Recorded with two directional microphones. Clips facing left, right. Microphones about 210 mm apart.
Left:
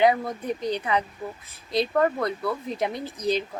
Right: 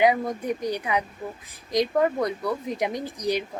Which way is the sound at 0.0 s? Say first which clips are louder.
Even; 10° right (ahead or behind).